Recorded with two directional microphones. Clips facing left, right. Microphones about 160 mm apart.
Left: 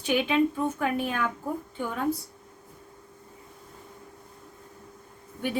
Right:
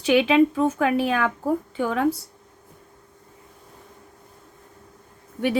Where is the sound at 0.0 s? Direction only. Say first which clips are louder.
Right 7 dB; 90° right.